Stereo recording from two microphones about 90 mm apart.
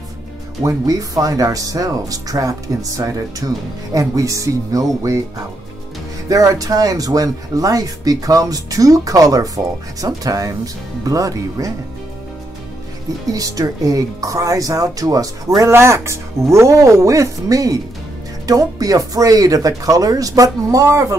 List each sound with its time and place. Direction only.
0.7 s speech: 40° right (ahead or behind)
6.2 s speech: 40° right (ahead or behind)
13.3 s speech: 40° right (ahead or behind)
15.7 s speech: 30° right (ahead or behind)